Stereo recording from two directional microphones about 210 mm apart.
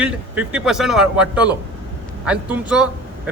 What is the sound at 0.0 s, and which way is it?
A man's voice, 5° right (ahead or behind).